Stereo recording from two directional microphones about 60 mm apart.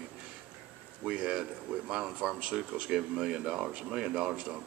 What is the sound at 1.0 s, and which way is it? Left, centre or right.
Speech, centre.